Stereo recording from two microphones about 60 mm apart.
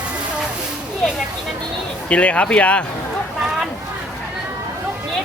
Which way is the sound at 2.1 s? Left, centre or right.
Left.